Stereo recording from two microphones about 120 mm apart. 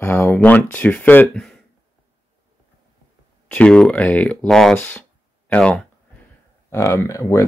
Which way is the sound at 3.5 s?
10° left (ahead or behind).